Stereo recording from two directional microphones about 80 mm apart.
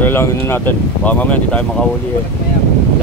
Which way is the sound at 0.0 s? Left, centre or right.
Left.